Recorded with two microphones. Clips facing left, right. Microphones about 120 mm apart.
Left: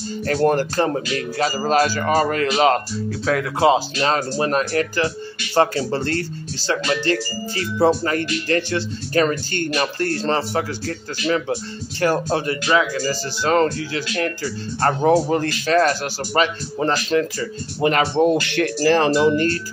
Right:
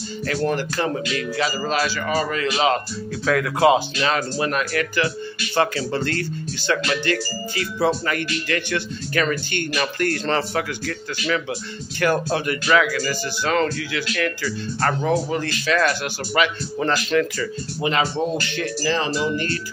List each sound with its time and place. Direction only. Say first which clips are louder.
0.3 s speech: left 5 dB; 45° left (ahead or behind)
3.3 s speech: even; 30° left (ahead or behind)
12.6 s speech: right 1 dB; 25° left (ahead or behind)
17.7 s speech: left 5 dB; 50° left (ahead or behind)
19.3 s speech: left 6 dB; 45° left (ahead or behind)